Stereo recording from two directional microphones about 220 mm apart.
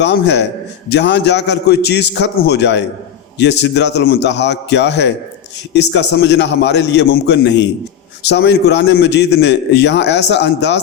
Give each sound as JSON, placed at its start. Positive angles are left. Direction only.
{"t": 0.0, "sound": "a man's voice", "side_deg": 50}